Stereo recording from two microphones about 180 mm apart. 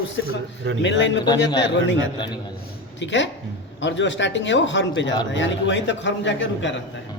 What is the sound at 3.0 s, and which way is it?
A man's voice, 90° left.